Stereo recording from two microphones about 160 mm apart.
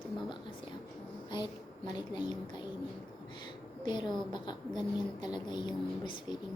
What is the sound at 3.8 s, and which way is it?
A woman's voice, 30° left (ahead or behind).